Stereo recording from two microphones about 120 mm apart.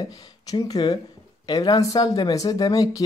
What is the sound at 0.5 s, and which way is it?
Speech, 30° left (ahead or behind).